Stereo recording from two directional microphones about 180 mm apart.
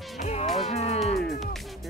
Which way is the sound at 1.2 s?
Centre (ahead or behind).